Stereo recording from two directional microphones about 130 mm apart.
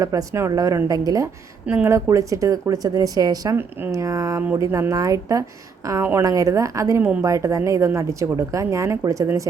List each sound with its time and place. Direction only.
0.0 s a woman's voice: 25° right (ahead or behind)
1.6 s a woman's voice: 15° right (ahead or behind)
3.6 s a woman's voice: 15° right (ahead or behind)